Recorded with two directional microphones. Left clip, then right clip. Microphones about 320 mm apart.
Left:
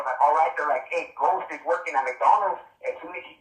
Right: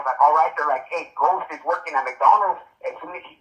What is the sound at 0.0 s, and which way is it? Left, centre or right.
Speech, centre.